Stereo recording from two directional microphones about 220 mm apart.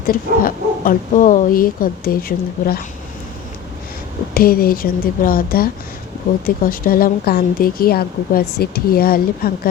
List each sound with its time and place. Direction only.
0.1 s speech: 40° left (ahead or behind)
4.4 s speech: 40° left (ahead or behind)